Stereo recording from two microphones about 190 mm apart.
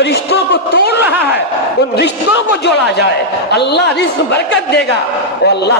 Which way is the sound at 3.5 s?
60° left (ahead or behind).